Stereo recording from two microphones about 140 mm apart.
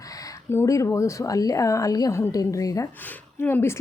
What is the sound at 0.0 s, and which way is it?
Speech, 25° left (ahead or behind).